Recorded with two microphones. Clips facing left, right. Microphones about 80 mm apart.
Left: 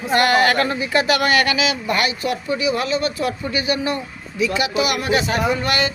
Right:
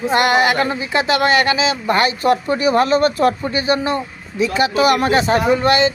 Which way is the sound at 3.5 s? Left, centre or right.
Right.